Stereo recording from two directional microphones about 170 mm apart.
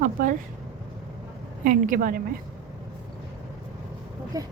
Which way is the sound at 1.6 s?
50° right (ahead or behind).